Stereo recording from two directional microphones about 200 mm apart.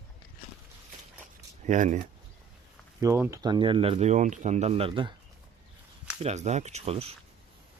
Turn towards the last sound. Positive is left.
turn(degrees=-30)  # may be behind; listen again after turning